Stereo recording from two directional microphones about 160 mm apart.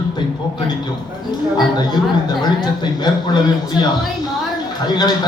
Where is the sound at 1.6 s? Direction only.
25° left (ahead or behind).